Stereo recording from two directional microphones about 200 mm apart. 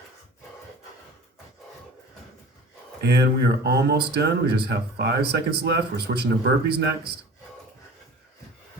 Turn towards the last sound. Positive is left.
turn(degrees=-55)  # may be behind; listen again after turning